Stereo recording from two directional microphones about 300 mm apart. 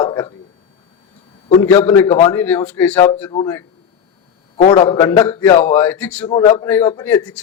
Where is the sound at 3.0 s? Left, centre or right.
Centre.